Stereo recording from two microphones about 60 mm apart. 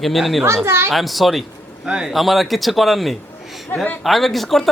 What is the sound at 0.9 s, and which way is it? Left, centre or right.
Speech, centre.